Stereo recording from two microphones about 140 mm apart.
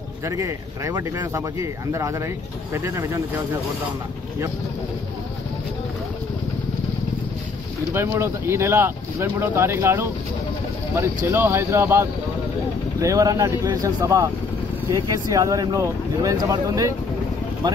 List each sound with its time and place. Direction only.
0.2 s speech: 20° right (ahead or behind)
7.9 s speech: 20° right (ahead or behind)
11.2 s speech: 15° right (ahead or behind)